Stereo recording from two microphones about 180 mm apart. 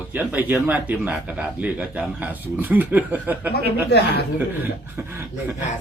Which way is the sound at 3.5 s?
65° left (ahead or behind).